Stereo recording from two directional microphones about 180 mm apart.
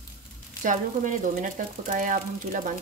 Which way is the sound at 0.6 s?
45° right (ahead or behind).